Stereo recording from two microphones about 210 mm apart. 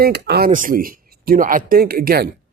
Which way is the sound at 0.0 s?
50° right (ahead or behind).